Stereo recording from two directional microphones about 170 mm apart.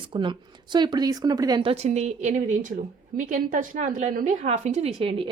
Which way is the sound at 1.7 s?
40° right (ahead or behind).